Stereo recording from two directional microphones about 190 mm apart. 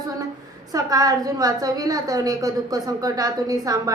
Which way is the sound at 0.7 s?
20° right (ahead or behind).